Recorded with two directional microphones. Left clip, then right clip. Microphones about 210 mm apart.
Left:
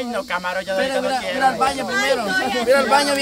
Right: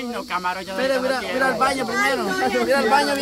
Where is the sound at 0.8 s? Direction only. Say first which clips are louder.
Even; 10° left (ahead or behind).